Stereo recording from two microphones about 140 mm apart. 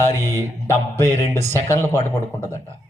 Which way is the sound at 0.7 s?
20° left (ahead or behind).